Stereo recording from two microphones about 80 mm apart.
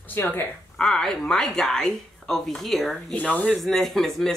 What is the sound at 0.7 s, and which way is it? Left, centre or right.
Speech, centre.